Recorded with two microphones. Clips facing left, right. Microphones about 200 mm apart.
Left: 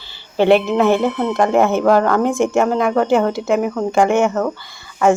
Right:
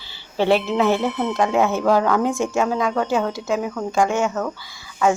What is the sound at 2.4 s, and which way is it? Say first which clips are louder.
Speech: left 5 dB; 65° left (ahead or behind).